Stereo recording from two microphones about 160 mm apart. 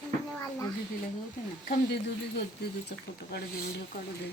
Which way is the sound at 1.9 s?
90° left.